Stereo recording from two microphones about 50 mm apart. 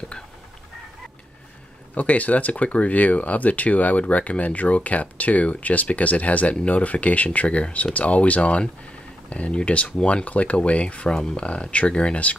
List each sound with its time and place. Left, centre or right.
2.0 s speech: left